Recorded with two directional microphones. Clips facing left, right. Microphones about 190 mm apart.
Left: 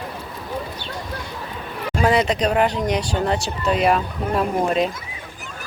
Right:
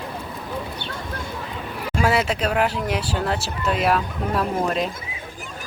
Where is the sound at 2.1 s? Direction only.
5° right (ahead or behind).